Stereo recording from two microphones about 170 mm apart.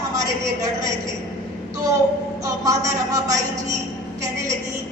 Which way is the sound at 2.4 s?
20° right (ahead or behind).